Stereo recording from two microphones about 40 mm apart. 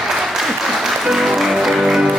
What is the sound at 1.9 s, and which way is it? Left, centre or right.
Music, centre.